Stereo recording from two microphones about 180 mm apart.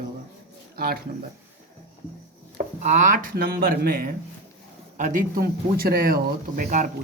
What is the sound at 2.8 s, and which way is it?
Speech, 45° right (ahead or behind).